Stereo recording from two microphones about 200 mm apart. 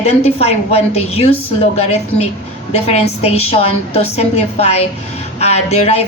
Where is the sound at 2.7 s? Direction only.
30° left (ahead or behind).